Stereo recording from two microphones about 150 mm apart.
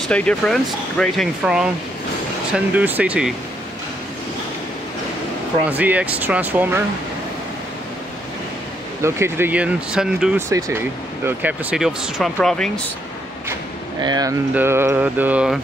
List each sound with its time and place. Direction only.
0.1 s speech: 5° left (ahead or behind)
5.7 s speech: 10° right (ahead or behind)
9.0 s speech: 15° right (ahead or behind)
10.3 s speech: 15° right (ahead or behind); by 12.8 s 5° left (ahead or behind)
14.0 s speech: 25° right (ahead or behind)
14.5 s speech: 15° right (ahead or behind)